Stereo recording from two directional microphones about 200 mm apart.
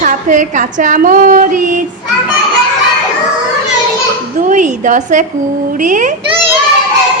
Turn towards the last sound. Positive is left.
turn(degrees=-40)  # may be behind; listen again after turning